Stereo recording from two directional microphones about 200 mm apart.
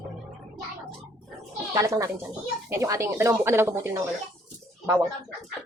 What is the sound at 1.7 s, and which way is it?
Speech, 15° right (ahead or behind).